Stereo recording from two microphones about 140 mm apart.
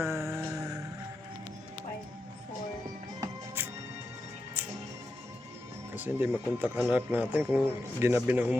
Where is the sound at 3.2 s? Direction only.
15° right (ahead or behind).